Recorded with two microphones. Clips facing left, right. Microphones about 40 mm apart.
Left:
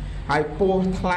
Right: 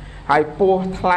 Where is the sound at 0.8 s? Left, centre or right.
Right.